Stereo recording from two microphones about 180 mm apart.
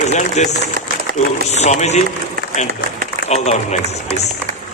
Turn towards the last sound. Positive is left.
turn(degrees=40)  # may be behind; listen again after turning